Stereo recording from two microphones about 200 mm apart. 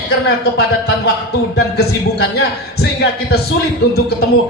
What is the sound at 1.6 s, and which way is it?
A man's voice, 55° left (ahead or behind).